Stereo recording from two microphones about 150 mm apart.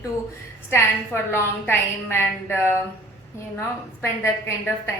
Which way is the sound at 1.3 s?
15° left (ahead or behind).